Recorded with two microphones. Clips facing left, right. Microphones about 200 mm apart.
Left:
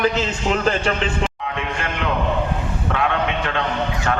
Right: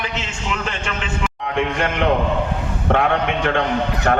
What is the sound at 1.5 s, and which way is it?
Speech, 60° right (ahead or behind).